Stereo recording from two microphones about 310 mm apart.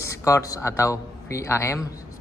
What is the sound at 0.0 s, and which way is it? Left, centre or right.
A man's voice, centre.